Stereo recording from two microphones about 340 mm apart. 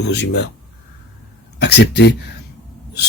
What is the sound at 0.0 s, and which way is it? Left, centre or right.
Speech, left.